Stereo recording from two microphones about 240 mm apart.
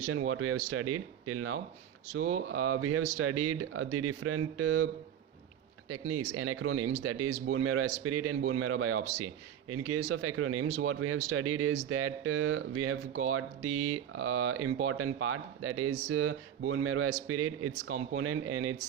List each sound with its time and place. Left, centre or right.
0.1 s speech: right
5.9 s speech: right